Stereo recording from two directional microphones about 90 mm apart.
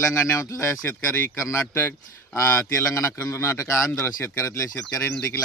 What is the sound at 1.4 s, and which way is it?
A man's voice, 30° left (ahead or behind).